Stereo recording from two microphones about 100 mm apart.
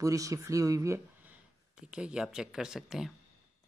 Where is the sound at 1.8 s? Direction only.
10° right (ahead or behind).